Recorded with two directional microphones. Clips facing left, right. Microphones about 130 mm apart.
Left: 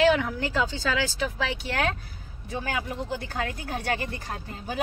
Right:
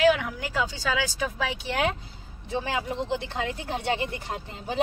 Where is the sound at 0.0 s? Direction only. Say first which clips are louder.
Even; 5° right (ahead or behind).